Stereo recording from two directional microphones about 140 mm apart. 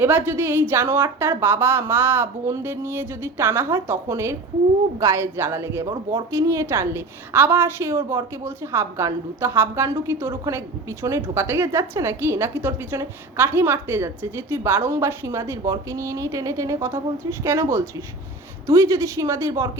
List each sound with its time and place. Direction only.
0.0 s a woman's voice: 15° right (ahead or behind)